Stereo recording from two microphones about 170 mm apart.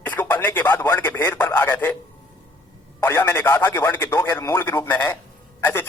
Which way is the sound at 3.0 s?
10° left (ahead or behind).